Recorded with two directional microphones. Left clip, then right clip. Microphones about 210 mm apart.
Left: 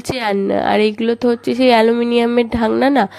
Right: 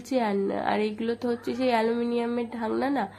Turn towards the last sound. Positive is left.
turn(degrees=40)  # may be behind; listen again after turning